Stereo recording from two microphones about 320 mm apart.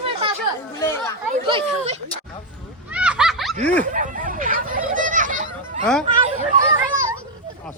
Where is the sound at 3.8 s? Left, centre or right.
Right.